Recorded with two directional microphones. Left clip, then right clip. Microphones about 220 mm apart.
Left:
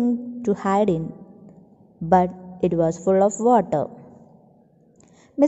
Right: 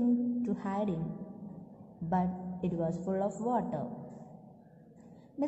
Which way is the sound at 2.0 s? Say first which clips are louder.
Left 16 dB; 45° left (ahead or behind).